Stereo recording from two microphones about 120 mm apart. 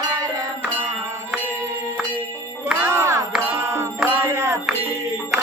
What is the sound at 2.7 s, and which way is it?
Music, 20° right (ahead or behind).